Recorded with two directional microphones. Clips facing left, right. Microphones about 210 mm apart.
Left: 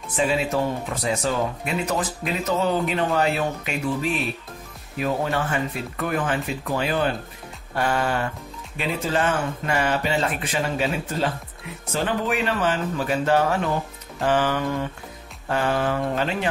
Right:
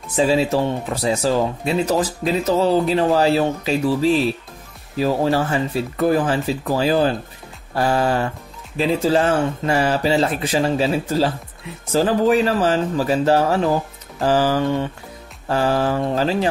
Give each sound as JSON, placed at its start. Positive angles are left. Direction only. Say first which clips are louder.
{"t": 0.1, "sound": "speech", "louder": "right 5 dB", "side_deg": -30}